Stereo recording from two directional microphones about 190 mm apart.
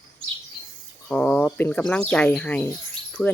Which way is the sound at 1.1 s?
5° left (ahead or behind).